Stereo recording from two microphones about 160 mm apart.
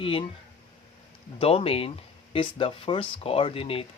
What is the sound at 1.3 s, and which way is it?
Speech, 35° left (ahead or behind).